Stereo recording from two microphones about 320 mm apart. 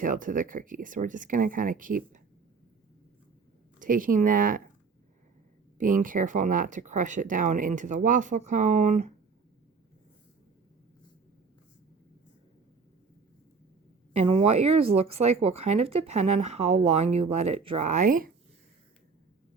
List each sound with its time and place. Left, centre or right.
0.0 s speech: right
3.8 s speech: right
5.7 s speech: right
14.1 s speech: centre